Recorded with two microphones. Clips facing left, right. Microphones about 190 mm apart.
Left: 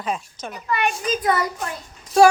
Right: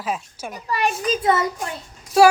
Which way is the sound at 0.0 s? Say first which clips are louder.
Even; 5° right (ahead or behind).